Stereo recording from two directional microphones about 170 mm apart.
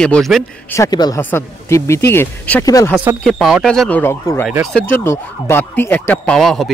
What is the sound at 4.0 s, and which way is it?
Speech, 15° left (ahead or behind).